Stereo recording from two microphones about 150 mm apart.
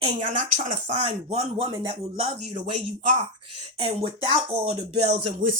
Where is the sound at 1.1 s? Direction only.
40° right (ahead or behind).